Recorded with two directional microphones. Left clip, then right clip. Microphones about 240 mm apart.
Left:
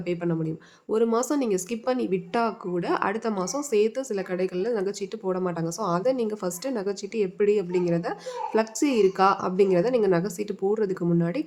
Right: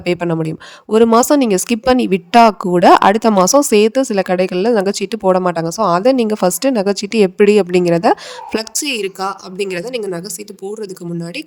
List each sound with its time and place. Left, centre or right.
0.0 s speech: right